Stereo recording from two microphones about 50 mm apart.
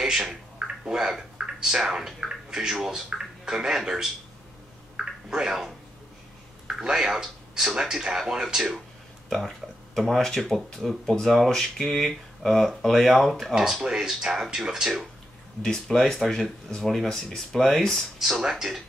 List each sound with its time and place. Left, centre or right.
0.0 s speech: centre
4.9 s a sound: centre
6.7 s speech: centre
9.3 s speech: centre
15.6 s speech: centre
18.4 s speech: centre